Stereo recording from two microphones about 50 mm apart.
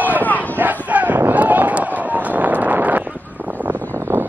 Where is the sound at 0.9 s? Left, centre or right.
Right.